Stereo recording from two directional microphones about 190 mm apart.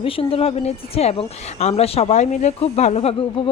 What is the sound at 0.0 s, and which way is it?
Speech, 30° left (ahead or behind).